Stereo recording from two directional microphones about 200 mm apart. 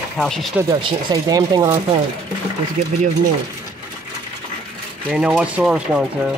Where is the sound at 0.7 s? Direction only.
25° right (ahead or behind).